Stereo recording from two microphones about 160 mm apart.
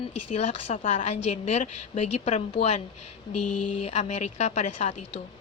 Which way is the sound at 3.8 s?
40° left (ahead or behind).